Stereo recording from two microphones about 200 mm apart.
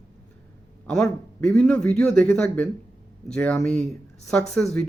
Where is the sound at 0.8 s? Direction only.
5° left (ahead or behind).